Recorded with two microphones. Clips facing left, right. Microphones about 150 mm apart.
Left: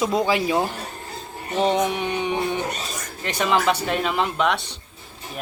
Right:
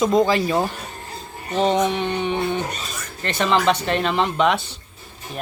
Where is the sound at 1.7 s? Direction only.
10° left (ahead or behind).